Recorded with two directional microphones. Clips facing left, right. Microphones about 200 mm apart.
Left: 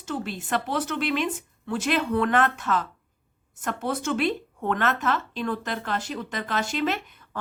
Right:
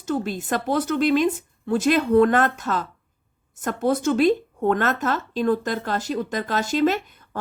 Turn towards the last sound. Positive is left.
turn(degrees=-40)  # may be behind; listen again after turning